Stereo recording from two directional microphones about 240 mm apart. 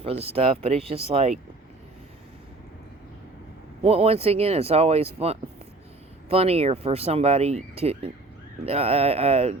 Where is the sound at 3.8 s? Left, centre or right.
Right.